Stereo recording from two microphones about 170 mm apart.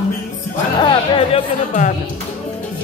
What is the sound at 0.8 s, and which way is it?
Speech, 30° left (ahead or behind).